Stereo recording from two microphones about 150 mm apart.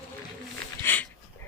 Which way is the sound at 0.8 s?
15° left (ahead or behind).